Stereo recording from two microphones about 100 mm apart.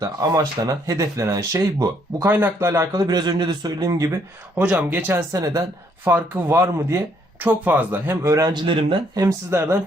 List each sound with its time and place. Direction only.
0.0 s speech: 35° right (ahead or behind)
4.5 s speech: 15° right (ahead or behind)
5.3 s speech: 35° right (ahead or behind)
6.1 s speech: 15° right (ahead or behind)
6.5 s speech: 30° right (ahead or behind)
8.1 s speech: 35° right (ahead or behind)
8.5 s speech: 60° right (ahead or behind)
9.1 s speech: 30° right (ahead or behind)